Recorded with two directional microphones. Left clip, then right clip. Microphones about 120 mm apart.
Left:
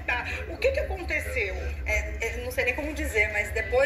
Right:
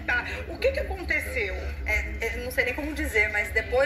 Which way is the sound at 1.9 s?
30° left (ahead or behind).